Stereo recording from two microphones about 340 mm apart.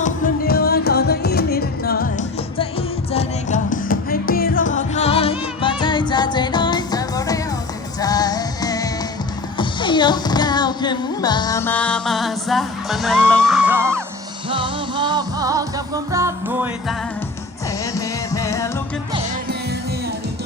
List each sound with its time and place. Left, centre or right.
0.0 s music: left
3.1 s music: centre
9.6 s speech: centre
14.5 s music: centre
17.9 s music: centre